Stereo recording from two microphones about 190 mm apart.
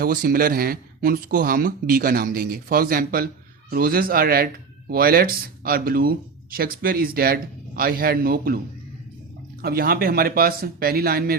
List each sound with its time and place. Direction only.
0.0 s speech: 50° right (ahead or behind)